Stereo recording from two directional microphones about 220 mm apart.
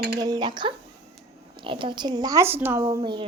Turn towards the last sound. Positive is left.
turn(degrees=-20)  # may be behind; listen again after turning